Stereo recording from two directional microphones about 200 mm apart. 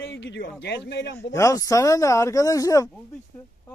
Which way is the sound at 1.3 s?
15° left (ahead or behind).